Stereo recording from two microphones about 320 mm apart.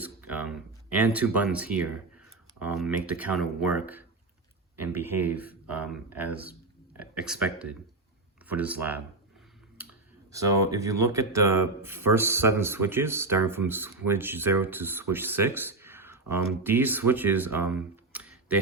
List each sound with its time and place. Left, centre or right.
0.0 s speech: centre
10.3 s speech: centre